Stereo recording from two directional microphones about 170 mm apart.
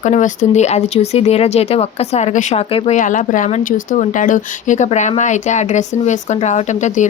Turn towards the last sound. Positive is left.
turn(degrees=45)  # may be behind; listen again after turning